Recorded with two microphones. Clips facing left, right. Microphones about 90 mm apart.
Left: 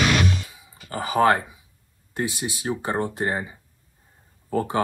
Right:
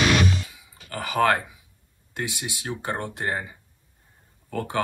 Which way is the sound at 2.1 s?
20° left (ahead or behind).